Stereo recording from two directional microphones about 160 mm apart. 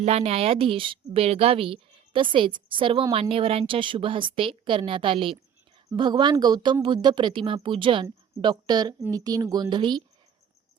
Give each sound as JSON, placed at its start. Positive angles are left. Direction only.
{"t": 0.0, "sound": "a woman's voice", "side_deg": -40}